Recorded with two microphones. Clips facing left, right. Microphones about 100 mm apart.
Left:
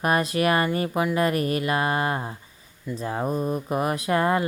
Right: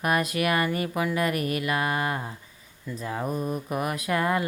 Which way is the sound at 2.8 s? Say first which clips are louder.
Left 3 dB; 30° left (ahead or behind).